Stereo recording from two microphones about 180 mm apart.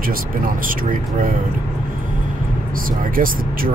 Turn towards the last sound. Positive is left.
turn(degrees=-50)  # may be behind; listen again after turning